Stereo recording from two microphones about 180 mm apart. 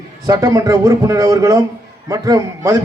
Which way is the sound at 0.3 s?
20° right (ahead or behind).